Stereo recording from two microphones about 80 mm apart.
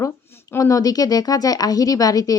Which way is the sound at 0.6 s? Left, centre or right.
Left.